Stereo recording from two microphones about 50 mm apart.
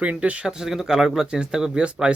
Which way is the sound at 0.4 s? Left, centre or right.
Centre.